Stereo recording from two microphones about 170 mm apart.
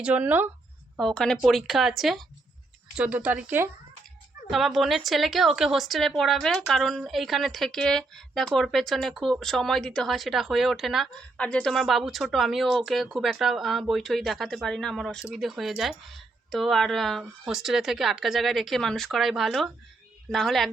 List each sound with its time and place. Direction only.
0.0 s speech: 10° right (ahead or behind)
0.9 s a woman's voice: 5° left (ahead or behind)